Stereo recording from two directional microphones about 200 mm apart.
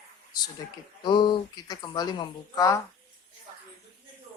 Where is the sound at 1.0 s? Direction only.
20° left (ahead or behind).